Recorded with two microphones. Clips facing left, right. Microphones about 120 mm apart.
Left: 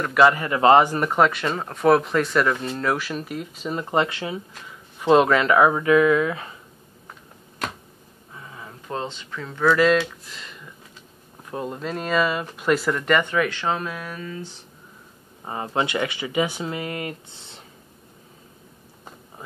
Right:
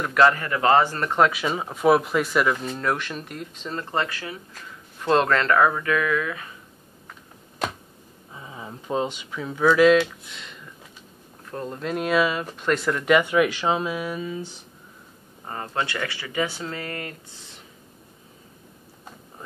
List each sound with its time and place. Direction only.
0.0 s speech: 5° left (ahead or behind)
0.4 s speech: 25° left (ahead or behind)
4.6 s speech: 5° left (ahead or behind); by 6.5 s 30° left (ahead or behind)
8.3 s speech: 15° right (ahead or behind); by 10.7 s centre (ahead or behind)
11.5 s speech: 10° left (ahead or behind)
11.8 s speech: 5° right (ahead or behind)
15.4 s speech: 15° left (ahead or behind)